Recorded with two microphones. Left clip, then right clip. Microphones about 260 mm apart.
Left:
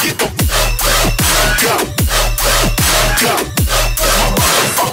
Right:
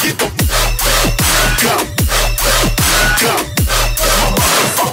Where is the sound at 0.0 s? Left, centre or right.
Centre.